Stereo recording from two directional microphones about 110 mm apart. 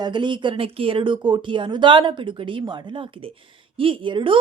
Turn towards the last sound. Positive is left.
turn(degrees=-50)  # may be behind; listen again after turning